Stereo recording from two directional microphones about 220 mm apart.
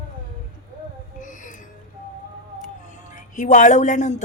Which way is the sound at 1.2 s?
35° left (ahead or behind).